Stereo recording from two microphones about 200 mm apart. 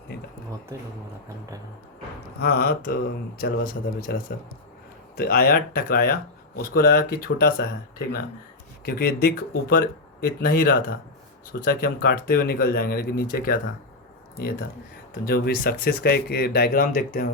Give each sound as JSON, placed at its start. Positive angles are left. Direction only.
{"t": 2.4, "sound": "speech", "side_deg": 50}